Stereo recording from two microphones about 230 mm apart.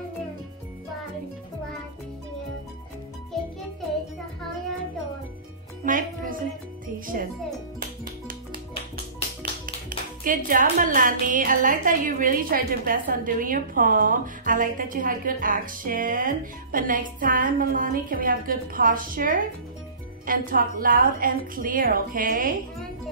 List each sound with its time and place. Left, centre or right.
5.9 s music: right
7.1 s a woman's voice: right
7.8 s music: right
9.8 s a woman's voice: right